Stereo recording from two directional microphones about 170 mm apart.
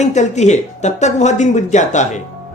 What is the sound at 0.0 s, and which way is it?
Speech, 45° left (ahead or behind).